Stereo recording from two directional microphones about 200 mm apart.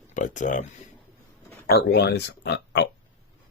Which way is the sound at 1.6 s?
55° left (ahead or behind).